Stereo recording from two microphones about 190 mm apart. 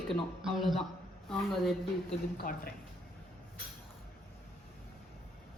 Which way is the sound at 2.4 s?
45° left (ahead or behind).